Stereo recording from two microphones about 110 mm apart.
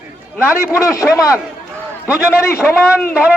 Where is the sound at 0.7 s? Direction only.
30° left (ahead or behind).